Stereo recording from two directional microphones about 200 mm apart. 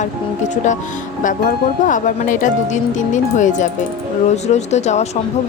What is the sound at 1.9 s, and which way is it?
Speech, 40° left (ahead or behind).